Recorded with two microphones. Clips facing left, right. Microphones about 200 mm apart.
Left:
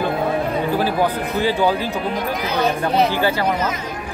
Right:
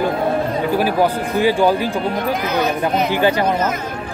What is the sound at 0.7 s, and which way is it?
A man's voice, 15° right (ahead or behind).